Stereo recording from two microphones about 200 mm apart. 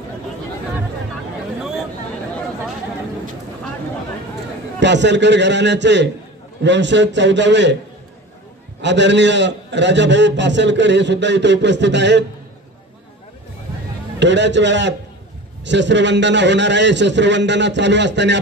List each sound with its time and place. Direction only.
4.7 s a man's voice: 60° right (ahead or behind)
8.8 s a man's voice: 60° right (ahead or behind)
14.2 s a man's voice: 60° right (ahead or behind)